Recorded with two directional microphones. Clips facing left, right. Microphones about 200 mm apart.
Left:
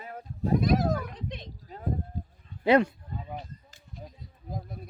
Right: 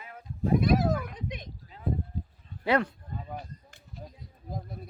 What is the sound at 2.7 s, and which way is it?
Speech, 20° left (ahead or behind).